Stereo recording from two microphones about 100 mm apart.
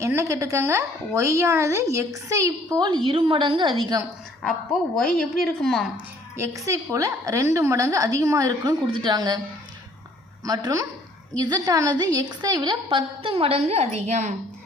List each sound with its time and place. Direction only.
0.0 s a woman's voice: 30° right (ahead or behind); by 3.9 s 50° right (ahead or behind)
4.9 s a woman's voice: 5° left (ahead or behind)
6.3 s a woman's voice: 30° right (ahead or behind)
8.9 s a woman's voice: 50° right (ahead or behind)
10.4 s a woman's voice: 35° right (ahead or behind); by 14.2 s 90° right